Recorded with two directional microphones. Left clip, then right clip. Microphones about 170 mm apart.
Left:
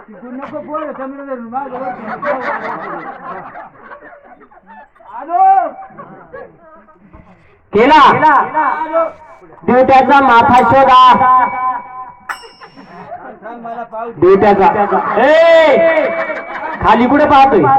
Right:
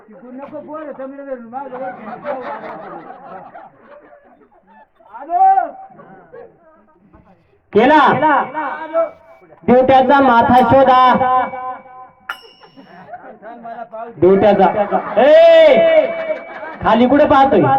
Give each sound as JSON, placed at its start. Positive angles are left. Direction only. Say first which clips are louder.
{"t": 0.8, "sound": "a man's voice", "louder": "left 5 dB", "side_deg": -20}
{"t": 2.0, "sound": "a sound", "louder": "left 10 dB", "side_deg": -60}
{"t": 7.8, "sound": "a man's voice", "louder": "left 4 dB", "side_deg": -35}
{"t": 13.4, "sound": "a man's voice", "louder": "left 5 dB", "side_deg": -5}
{"t": 14.2, "sound": "a man's voice", "louder": "left 2 dB", "side_deg": -35}